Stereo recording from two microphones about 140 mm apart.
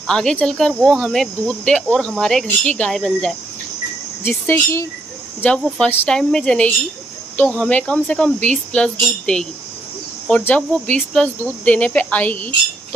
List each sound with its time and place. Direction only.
0.0 s speech: 5° left (ahead or behind)
4.2 s speech: 15° left (ahead or behind)